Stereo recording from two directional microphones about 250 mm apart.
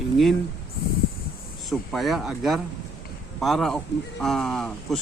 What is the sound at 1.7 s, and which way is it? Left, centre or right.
Speech, centre.